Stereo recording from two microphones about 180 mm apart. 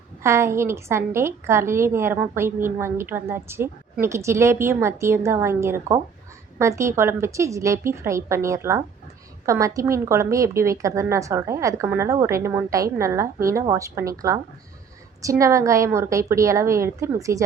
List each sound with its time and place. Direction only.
0.2 s a woman's voice: 15° right (ahead or behind)